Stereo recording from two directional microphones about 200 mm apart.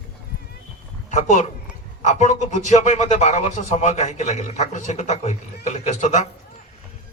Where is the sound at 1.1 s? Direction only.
35° left (ahead or behind).